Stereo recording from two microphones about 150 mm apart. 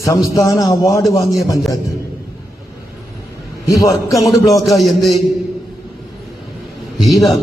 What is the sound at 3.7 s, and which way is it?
Speech, 20° left (ahead or behind).